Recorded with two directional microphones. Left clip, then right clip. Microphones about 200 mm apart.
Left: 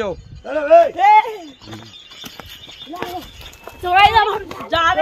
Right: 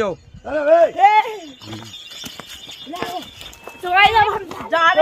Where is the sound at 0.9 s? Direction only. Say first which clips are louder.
Left 2 dB; 15° right (ahead or behind).